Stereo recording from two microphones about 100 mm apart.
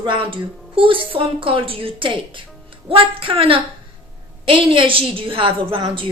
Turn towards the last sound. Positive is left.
turn(degrees=-55)  # may be behind; listen again after turning